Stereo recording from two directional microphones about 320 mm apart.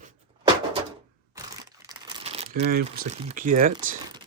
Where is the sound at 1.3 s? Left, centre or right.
Centre; by 3.7 s right.